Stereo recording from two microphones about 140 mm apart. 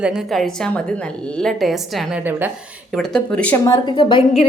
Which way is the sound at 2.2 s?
15° right (ahead or behind).